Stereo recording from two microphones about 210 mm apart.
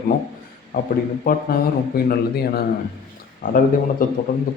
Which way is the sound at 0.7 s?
45° left (ahead or behind).